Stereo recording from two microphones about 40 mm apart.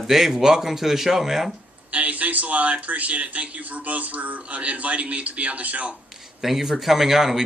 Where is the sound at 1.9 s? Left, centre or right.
Right.